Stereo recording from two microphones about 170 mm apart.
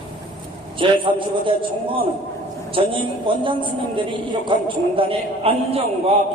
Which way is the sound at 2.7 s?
30° right (ahead or behind).